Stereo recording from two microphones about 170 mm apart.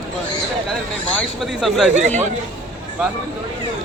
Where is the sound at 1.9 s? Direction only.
40° right (ahead or behind).